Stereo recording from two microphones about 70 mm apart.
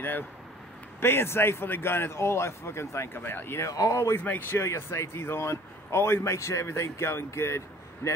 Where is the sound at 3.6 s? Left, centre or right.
Left.